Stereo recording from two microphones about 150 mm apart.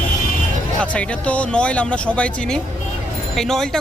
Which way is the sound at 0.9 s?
10° left (ahead or behind).